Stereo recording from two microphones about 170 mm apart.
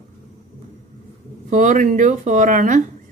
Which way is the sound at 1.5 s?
45° right (ahead or behind).